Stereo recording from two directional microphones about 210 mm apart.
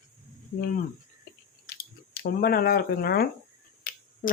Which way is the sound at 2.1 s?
45° left (ahead or behind).